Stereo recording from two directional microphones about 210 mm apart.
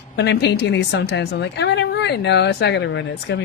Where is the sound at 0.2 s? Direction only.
55° left (ahead or behind).